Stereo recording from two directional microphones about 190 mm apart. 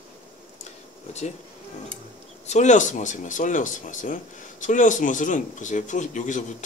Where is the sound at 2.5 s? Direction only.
40° left (ahead or behind).